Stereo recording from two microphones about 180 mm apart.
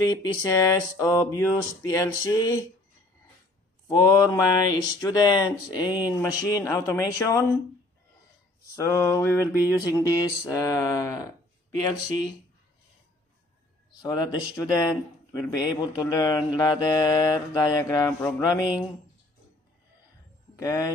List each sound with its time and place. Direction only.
0.0 s mantra: 20° left (ahead or behind)
3.8 s mantra: 20° left (ahead or behind)
6.1 s a sound: 20° left (ahead or behind)
8.7 s a sound: 20° left (ahead or behind)
14.0 s mantra: 20° left (ahead or behind)
20.5 s speech: 20° left (ahead or behind)